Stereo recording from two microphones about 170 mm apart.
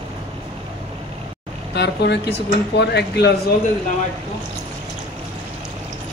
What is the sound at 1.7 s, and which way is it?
Speech, 85° left.